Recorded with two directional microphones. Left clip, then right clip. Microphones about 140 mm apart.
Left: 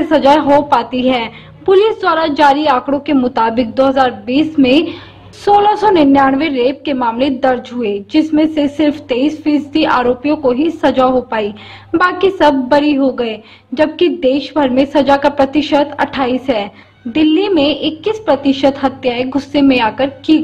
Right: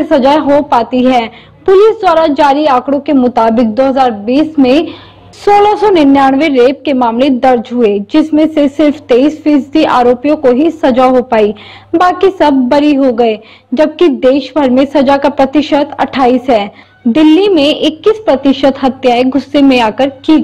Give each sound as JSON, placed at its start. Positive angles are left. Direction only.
{"t": 0.0, "sound": "a woman's voice", "side_deg": -20}